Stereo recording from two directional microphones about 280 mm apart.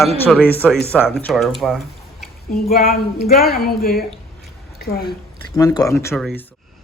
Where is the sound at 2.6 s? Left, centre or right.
Left.